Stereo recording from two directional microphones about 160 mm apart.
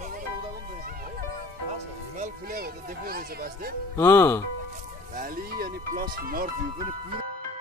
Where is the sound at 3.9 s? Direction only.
20° left (ahead or behind).